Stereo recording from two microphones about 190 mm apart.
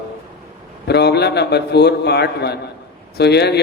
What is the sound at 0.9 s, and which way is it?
A man's voice, 60° left (ahead or behind).